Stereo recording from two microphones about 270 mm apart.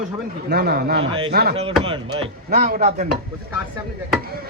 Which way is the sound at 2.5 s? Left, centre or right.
Right.